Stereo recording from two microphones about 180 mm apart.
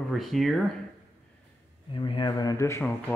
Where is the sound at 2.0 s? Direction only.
25° left (ahead or behind).